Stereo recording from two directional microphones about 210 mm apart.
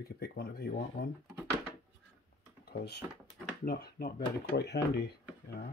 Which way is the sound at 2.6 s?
45° left (ahead or behind).